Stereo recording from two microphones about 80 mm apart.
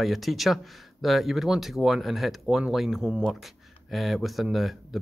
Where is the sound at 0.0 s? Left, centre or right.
Centre.